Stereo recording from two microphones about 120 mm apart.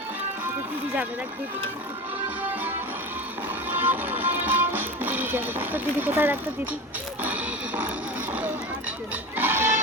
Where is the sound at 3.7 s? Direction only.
15° right (ahead or behind).